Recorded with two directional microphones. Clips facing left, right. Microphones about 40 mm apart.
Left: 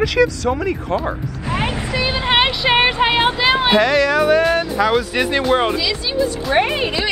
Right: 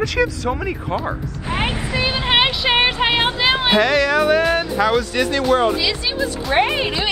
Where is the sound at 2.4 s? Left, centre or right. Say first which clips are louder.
Left 2 dB; centre.